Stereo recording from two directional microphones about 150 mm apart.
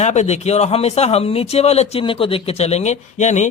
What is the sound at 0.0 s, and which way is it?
Speech, 50° left (ahead or behind).